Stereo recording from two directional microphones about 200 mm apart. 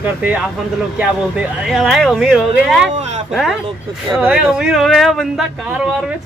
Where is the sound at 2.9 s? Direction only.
35° right (ahead or behind).